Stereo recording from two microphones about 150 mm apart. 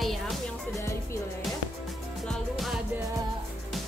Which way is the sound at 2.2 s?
Centre (ahead or behind).